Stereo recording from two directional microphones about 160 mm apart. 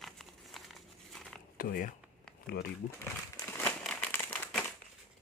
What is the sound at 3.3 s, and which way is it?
Crumpling, 15° left (ahead or behind).